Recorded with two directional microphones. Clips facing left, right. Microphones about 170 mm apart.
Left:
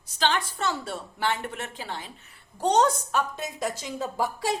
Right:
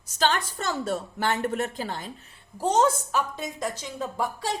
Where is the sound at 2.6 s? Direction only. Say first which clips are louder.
Even; 5° right (ahead or behind).